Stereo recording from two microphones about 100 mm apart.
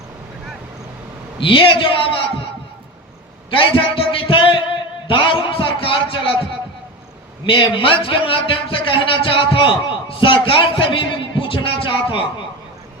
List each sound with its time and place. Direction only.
1.4 s a man's voice: 60° left (ahead or behind)
3.5 s a sound: 60° left (ahead or behind)
7.4 s a man's voice: 60° left (ahead or behind)